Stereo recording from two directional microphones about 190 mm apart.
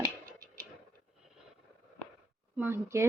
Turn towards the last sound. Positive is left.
turn(degrees=-15)  # may be behind; listen again after turning